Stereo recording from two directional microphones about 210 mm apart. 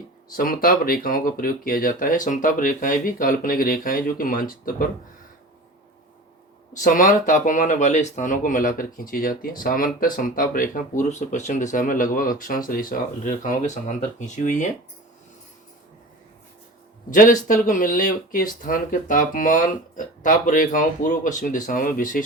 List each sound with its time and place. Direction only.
0.3 s speech: 40° left (ahead or behind)
6.8 s speech: 40° left (ahead or behind)
17.1 s speech: 40° left (ahead or behind)